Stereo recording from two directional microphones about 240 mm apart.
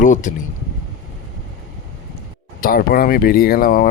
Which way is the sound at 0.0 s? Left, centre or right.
Left.